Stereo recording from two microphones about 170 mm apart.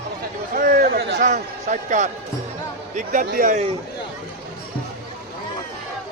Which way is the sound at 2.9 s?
50° right (ahead or behind).